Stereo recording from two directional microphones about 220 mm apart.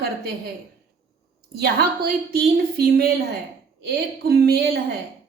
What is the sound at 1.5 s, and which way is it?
A woman's voice, 45° right (ahead or behind).